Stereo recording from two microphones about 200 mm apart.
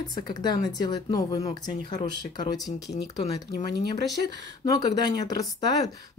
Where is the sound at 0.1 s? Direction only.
20° left (ahead or behind).